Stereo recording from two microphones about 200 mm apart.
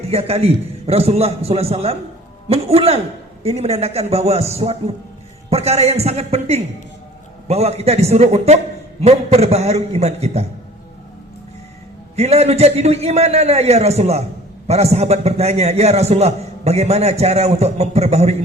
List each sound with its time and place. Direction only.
0.1 s a man's voice: 30° right (ahead or behind)
12.1 s a man's voice: 30° right (ahead or behind)